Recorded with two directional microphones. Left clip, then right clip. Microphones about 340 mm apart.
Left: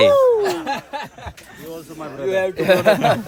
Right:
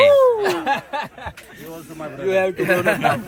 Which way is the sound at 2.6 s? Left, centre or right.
Left.